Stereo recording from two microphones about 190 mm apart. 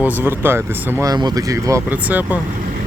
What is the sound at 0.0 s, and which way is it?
Speech, 10° right (ahead or behind).